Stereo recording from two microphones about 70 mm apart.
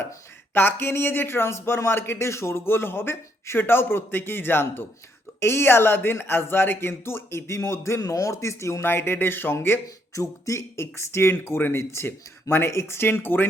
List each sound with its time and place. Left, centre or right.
0.5 s speech: left
8.8 s speech: left
10.2 s speech: left